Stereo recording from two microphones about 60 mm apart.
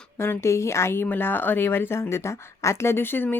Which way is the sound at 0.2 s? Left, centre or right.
Left.